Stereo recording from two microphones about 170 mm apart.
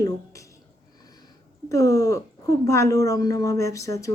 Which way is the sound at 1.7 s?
20° left (ahead or behind).